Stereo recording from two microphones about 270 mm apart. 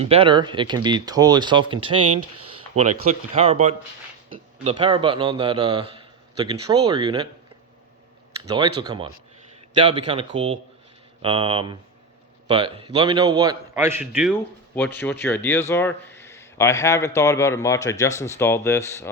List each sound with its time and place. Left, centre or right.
0.0 s speech: right
2.0 s speech: right
3.3 s a man's voice: right
8.4 s speech: centre
14.0 s speech: centre
14.3 s speech: centre